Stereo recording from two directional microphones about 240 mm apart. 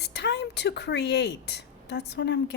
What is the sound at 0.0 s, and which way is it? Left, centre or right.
A woman's voice, left.